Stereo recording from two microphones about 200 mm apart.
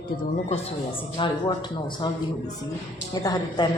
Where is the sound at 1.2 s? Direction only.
25° left (ahead or behind).